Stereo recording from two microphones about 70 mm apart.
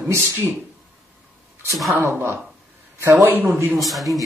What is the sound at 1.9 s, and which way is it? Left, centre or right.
Speech, right.